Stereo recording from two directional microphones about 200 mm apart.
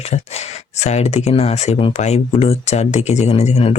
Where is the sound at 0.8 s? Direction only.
35° left (ahead or behind).